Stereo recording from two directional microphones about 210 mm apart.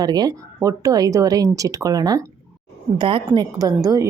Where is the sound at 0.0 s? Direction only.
20° right (ahead or behind).